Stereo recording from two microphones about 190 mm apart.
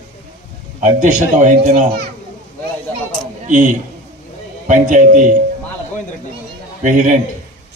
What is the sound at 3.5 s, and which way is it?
A man's voice, 40° right (ahead or behind).